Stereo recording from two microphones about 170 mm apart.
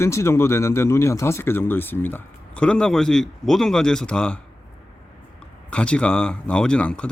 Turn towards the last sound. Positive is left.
turn(degrees=5)  # may be behind; listen again after turning